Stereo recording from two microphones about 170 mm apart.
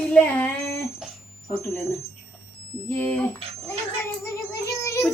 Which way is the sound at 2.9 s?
10° left (ahead or behind).